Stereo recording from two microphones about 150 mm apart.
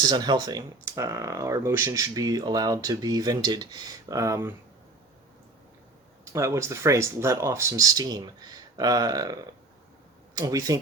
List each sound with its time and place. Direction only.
0.1 s speech: 25° right (ahead or behind)
6.3 s speech: 20° right (ahead or behind)